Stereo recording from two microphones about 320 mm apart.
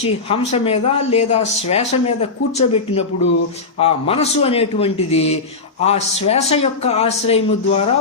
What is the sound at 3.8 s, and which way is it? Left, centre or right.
A man's voice, centre.